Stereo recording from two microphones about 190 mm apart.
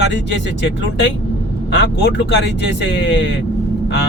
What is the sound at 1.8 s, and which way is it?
Speech, 65° left (ahead or behind).